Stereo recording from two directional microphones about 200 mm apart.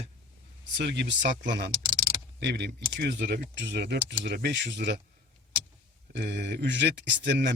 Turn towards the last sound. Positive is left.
turn(degrees=-60)  # may be behind; listen again after turning